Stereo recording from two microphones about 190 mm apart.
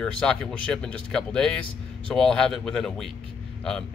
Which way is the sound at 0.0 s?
5° left (ahead or behind).